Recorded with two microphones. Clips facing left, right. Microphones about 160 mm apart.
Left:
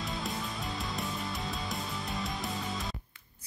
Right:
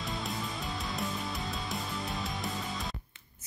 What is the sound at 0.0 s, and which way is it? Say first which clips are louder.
Music: even; centre (ahead or behind).